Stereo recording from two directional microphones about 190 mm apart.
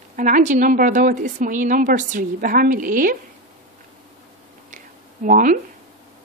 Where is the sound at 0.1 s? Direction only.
40° right (ahead or behind).